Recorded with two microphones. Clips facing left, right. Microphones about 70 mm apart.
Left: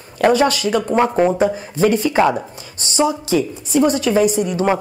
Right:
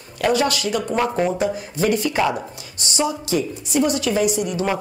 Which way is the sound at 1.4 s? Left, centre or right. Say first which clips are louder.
Left 5 dB; left.